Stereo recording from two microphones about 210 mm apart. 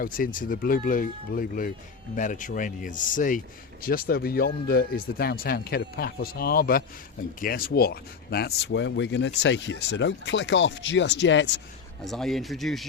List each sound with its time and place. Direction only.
0.0 s speech: 40° left (ahead or behind); by 11.6 s 60° left (ahead or behind)
12.0 s speech: centre (ahead or behind)